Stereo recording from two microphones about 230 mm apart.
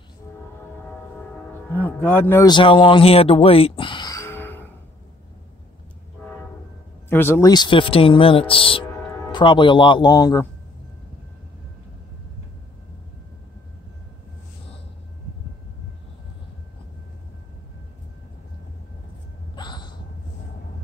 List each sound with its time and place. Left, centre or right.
1.7 s speech: centre
7.1 s speech: centre
19.5 s a sound: centre